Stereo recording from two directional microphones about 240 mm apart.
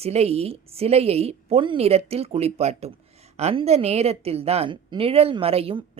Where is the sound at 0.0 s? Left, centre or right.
Right.